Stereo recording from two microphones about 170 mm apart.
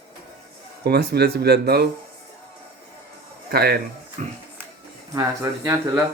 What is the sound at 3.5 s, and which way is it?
Speech, 65° right (ahead or behind).